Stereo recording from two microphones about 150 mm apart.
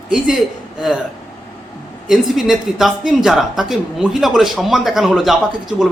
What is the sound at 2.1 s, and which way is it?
A man's voice, centre (ahead or behind).